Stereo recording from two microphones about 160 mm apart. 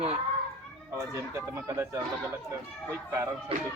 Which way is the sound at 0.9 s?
15° right (ahead or behind).